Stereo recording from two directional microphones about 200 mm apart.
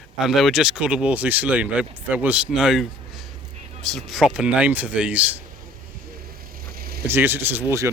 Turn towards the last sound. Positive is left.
turn(degrees=-15)  # may be behind; listen again after turning